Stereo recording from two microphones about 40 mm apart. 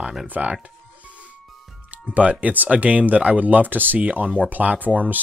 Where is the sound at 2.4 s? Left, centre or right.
Right.